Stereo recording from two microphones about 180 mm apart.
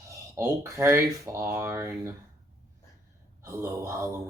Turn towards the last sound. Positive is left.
turn(degrees=-15)  # may be behind; listen again after turning